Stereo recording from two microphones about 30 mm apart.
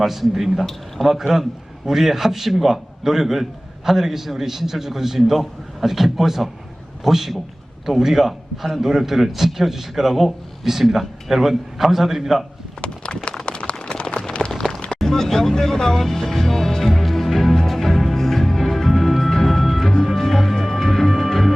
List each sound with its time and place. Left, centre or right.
0.0 s speech: centre
0.6 s speech: centre
1.0 s a man's voice: centre
12.8 s a sound: left
14.9 s speech: centre
16.8 s music: centre